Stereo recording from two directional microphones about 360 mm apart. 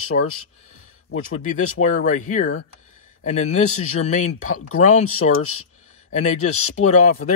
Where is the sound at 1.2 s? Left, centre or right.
Left.